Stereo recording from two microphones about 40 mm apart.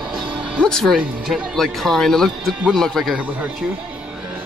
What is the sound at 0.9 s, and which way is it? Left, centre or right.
Speech, centre.